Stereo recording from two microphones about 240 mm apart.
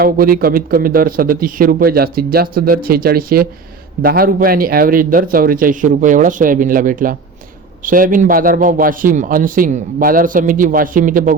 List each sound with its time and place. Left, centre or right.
0.0 s a man's voice: right